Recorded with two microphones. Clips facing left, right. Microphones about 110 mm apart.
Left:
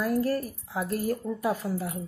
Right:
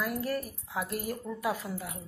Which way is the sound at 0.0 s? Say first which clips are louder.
Left 6 dB; 35° left (ahead or behind).